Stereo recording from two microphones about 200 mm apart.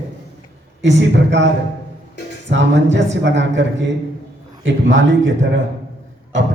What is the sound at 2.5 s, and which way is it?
Speech, 65° right (ahead or behind).